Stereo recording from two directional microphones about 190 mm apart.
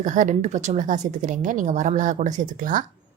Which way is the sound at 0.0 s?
40° right (ahead or behind).